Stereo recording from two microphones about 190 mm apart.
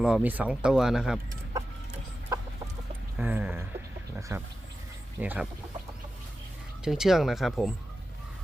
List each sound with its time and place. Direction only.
0.0 s speech: 5° right (ahead or behind)
2.3 s chicken: 15° right (ahead or behind)
3.2 s a sound: 10° right (ahead or behind)
4.3 s speech: 15° right (ahead or behind)
6.8 s speech: 5° right (ahead or behind)